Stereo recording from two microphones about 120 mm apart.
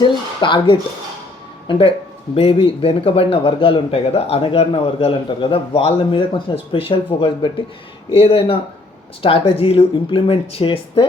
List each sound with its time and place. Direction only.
0.0 s speech: 40° left (ahead or behind)